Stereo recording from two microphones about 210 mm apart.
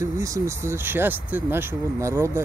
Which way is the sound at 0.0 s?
15° right (ahead or behind).